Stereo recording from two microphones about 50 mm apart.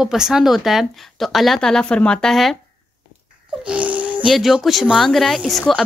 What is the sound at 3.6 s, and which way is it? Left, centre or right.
Wheeze, right.